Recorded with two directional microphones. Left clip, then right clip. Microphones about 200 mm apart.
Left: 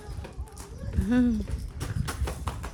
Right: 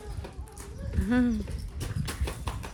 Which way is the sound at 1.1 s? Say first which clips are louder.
Left 1 dB; 20° left (ahead or behind).